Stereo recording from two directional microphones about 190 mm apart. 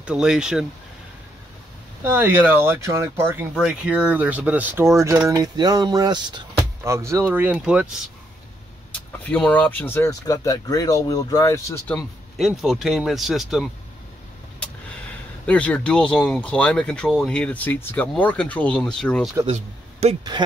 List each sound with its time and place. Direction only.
0.0 s speech: 5° right (ahead or behind)
2.0 s speech: 10° right (ahead or behind)
9.2 s speech: 10° left (ahead or behind)
12.4 s speech: centre (ahead or behind)
15.4 s speech: 5° left (ahead or behind)
19.4 s speech: 35° right (ahead or behind)